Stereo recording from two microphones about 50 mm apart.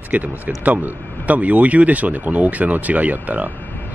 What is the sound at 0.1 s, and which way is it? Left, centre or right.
Speech, right.